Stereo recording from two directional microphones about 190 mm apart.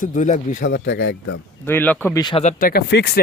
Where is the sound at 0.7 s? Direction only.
60° left (ahead or behind).